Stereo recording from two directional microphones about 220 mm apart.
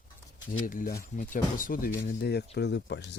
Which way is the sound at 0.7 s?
40° left (ahead or behind).